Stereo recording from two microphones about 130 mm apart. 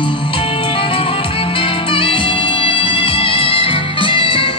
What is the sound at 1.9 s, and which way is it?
Music, 45° left (ahead or behind).